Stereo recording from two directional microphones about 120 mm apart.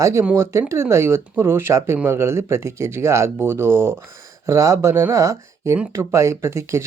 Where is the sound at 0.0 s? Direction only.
25° right (ahead or behind).